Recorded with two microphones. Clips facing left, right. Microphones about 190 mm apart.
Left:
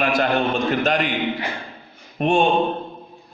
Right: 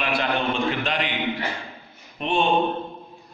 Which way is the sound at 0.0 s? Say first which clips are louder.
Left 5 dB; 45° left (ahead or behind).